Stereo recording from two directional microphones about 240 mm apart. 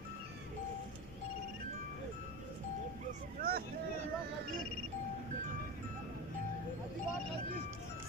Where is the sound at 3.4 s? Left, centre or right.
Right.